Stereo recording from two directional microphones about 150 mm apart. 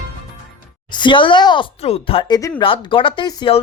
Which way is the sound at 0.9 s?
30° left (ahead or behind).